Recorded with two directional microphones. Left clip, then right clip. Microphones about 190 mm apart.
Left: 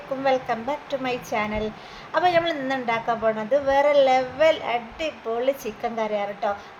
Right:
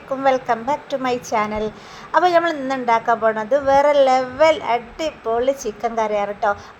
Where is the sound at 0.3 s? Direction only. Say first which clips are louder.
Right 5 dB; 25° right (ahead or behind).